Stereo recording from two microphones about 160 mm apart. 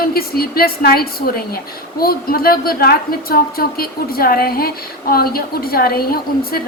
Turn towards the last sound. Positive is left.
turn(degrees=70)  # may be behind; listen again after turning